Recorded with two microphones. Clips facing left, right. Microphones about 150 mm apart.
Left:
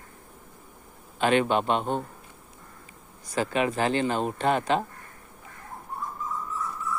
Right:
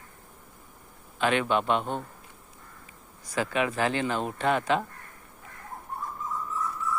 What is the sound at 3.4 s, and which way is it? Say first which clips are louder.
Speech: left 2 dB; 35° left (ahead or behind).